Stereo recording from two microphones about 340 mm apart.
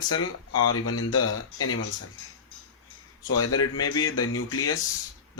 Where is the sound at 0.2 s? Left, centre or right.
Left.